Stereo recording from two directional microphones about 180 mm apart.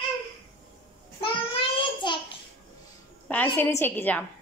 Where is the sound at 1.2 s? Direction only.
30° left (ahead or behind).